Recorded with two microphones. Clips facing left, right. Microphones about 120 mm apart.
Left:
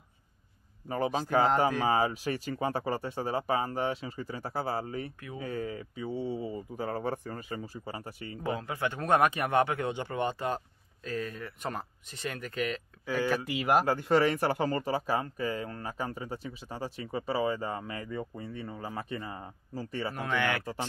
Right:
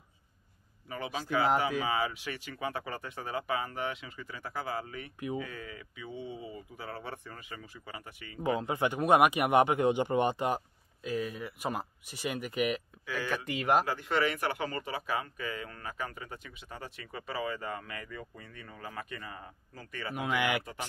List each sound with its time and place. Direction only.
0.8 s speech: 40° left (ahead or behind)
8.4 s a man's voice: 20° right (ahead or behind)
13.0 s speech: 45° left (ahead or behind)
13.3 s speech: centre (ahead or behind)
13.8 s speech: 40° left (ahead or behind)
20.2 s a man's voice: 10° right (ahead or behind)